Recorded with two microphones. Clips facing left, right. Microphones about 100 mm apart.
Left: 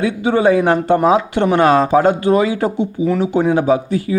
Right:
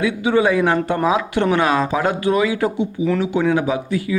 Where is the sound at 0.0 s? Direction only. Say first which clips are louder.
Left 2 dB; 35° left (ahead or behind).